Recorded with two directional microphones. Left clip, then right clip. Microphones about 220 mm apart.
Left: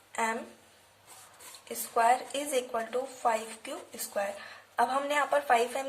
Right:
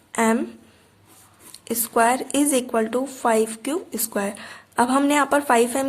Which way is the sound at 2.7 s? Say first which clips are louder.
Right 10 dB; 50° right (ahead or behind).